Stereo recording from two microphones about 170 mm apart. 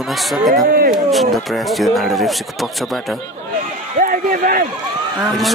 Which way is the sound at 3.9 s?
55° right (ahead or behind).